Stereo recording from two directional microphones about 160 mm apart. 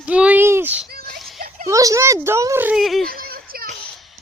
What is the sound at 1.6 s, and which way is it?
Speech, 20° right (ahead or behind).